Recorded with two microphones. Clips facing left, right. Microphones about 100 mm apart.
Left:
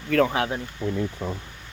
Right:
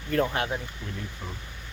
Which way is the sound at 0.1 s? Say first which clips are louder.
Left 5 dB; 90° left.